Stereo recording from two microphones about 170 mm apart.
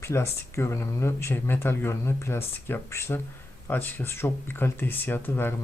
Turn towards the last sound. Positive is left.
turn(degrees=10)  # may be behind; listen again after turning